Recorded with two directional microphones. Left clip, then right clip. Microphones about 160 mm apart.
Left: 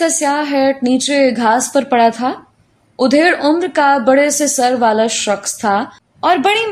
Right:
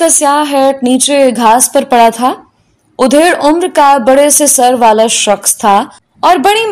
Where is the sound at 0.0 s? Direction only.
35° right (ahead or behind).